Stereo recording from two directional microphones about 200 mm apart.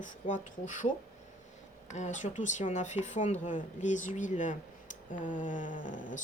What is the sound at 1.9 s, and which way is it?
Speech, 35° left (ahead or behind).